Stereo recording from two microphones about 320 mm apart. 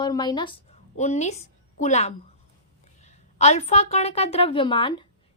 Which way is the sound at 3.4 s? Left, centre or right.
Centre.